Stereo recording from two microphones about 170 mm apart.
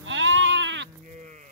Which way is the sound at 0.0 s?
90° right.